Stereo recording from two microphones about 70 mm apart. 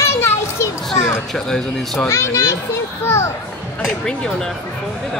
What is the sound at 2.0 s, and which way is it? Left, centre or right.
Speech, left.